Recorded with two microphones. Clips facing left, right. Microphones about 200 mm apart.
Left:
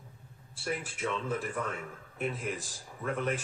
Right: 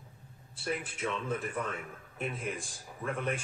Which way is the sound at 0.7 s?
25° left (ahead or behind).